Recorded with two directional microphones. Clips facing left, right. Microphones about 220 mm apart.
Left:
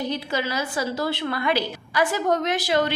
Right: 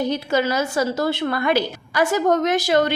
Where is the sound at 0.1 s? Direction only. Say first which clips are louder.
Right 6 dB; 45° right (ahead or behind).